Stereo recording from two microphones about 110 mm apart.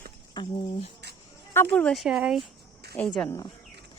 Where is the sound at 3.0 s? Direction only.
15° left (ahead or behind).